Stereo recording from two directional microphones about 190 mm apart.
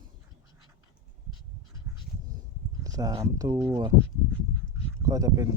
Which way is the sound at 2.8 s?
20° right (ahead or behind).